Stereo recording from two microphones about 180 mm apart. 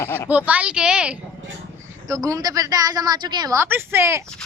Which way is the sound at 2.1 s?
20° right (ahead or behind).